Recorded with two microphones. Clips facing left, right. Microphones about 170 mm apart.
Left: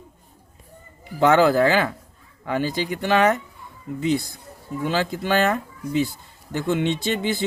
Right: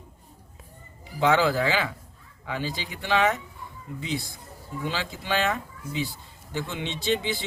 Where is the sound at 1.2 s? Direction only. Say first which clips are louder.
Left 6 dB; 45° left (ahead or behind).